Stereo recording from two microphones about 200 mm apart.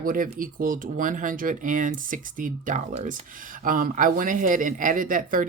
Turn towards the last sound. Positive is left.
turn(degrees=-40)  # may be behind; listen again after turning